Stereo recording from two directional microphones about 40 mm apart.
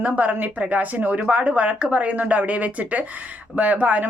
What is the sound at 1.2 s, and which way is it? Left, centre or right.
A woman's voice, right.